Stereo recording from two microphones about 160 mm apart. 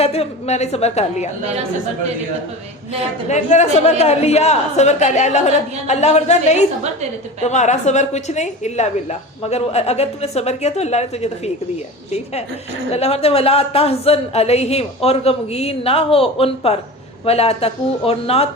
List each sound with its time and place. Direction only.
0.0 s a woman's voice: 40° left (ahead or behind)
3.2 s a woman's voice: 45° left (ahead or behind)